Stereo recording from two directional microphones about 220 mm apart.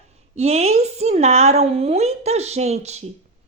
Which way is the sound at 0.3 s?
30° right (ahead or behind).